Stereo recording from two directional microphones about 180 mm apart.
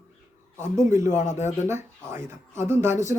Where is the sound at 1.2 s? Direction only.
40° left (ahead or behind).